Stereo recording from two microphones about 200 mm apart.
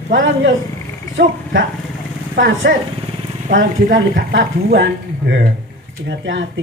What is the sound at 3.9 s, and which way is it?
A woman's voice, 65° right (ahead or behind).